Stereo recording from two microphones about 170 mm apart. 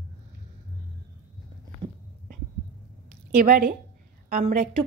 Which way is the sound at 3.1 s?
55° right (ahead or behind).